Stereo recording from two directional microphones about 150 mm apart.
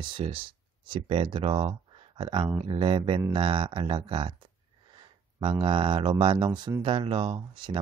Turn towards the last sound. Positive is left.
turn(degrees=-35)  # may be behind; listen again after turning